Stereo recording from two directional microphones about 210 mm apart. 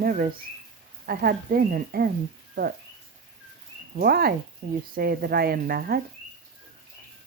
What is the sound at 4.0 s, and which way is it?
Speech, 45° right (ahead or behind).